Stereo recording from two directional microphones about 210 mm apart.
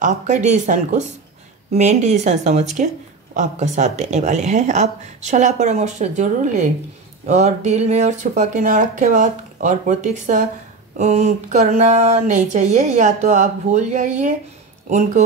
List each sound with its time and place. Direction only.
0.0 s speech: 35° right (ahead or behind)